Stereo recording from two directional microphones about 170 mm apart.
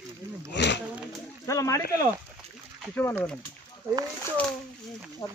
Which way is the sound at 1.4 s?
20° left (ahead or behind).